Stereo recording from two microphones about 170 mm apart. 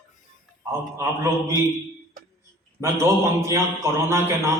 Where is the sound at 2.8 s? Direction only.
15° right (ahead or behind).